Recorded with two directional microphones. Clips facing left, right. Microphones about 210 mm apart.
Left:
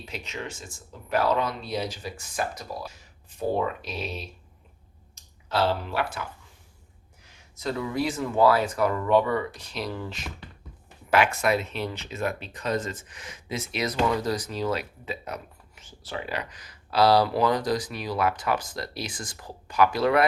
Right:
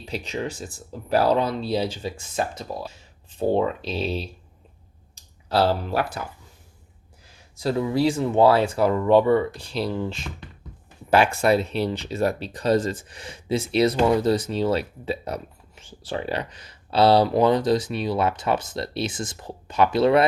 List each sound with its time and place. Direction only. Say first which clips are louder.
0.0 s speech: right 7 dB; 35° right (ahead or behind)
5.5 s speech: right 4 dB; 40° right (ahead or behind)
7.6 s speech: right 6 dB; 30° right (ahead or behind)